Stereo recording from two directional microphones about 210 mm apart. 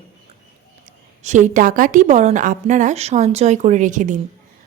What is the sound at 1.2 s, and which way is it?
A woman's voice, 35° right (ahead or behind).